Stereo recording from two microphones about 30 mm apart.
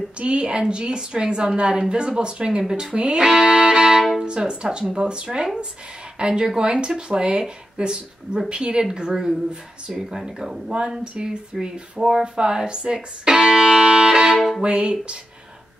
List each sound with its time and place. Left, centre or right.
0.2 s a woman's voice: right
9.9 s speech: centre
11.2 s speech: right
14.6 s a woman's voice: right